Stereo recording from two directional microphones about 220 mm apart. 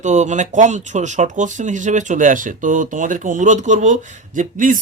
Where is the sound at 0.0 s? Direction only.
35° right (ahead or behind).